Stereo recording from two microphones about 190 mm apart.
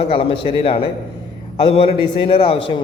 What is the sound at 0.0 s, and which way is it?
A man's voice, 30° left (ahead or behind).